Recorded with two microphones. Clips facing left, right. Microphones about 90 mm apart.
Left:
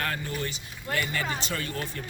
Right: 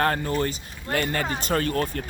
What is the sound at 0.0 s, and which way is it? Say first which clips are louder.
Speech: right 8 dB; 45° right (ahead or behind).